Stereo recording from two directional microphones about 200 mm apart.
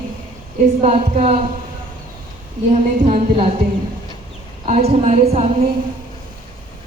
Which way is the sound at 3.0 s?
30° right (ahead or behind).